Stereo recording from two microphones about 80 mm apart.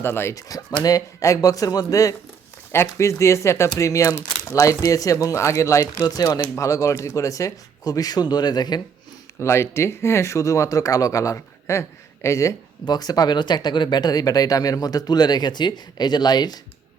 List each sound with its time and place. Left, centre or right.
0.0 s speech: left
0.3 s speech: left
9.4 s speech: left
12.9 s speech: left